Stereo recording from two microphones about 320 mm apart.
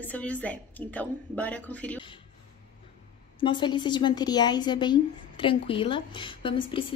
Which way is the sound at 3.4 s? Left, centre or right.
Centre.